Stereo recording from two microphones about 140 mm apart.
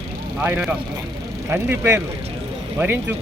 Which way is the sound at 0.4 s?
10° right (ahead or behind).